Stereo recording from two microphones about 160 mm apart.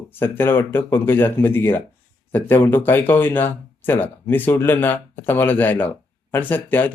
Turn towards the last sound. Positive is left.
turn(degrees=10)  # may be behind; listen again after turning